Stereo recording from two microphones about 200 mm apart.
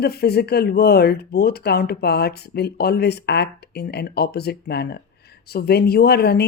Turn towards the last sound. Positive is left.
turn(degrees=55)  # may be behind; listen again after turning